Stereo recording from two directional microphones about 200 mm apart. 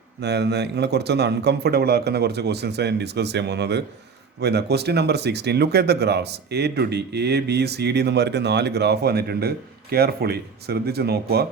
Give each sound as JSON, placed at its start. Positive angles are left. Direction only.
{"t": 0.2, "sound": "speech", "side_deg": -55}